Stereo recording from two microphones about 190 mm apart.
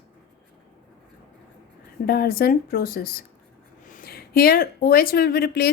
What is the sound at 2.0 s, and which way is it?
Speech, 55° left (ahead or behind).